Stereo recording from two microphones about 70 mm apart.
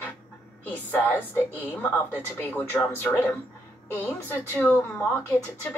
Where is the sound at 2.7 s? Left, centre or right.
Left.